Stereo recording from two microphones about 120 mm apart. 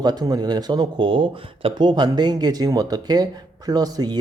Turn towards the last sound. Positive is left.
turn(degrees=-35)  # may be behind; listen again after turning